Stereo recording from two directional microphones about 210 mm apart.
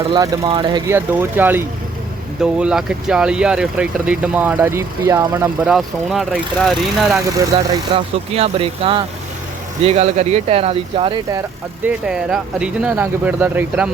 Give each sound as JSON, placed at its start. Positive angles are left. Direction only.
{"t": 0.1, "sound": "speech", "side_deg": -20}
{"t": 5.6, "sound": "speech", "side_deg": 0}
{"t": 7.3, "sound": "speech", "side_deg": -15}
{"t": 8.3, "sound": "speech", "side_deg": -30}
{"t": 11.9, "sound": "speech", "side_deg": -5}